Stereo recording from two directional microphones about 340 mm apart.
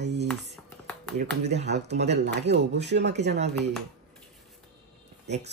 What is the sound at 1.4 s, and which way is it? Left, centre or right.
Speech, right.